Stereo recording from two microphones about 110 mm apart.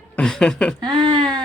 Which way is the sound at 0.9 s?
50° right (ahead or behind).